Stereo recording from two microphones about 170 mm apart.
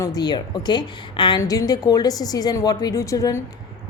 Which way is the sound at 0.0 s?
25° left (ahead or behind).